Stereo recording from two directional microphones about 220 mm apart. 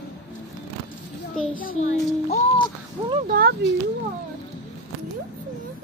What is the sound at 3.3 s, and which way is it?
Speech, 45° right (ahead or behind).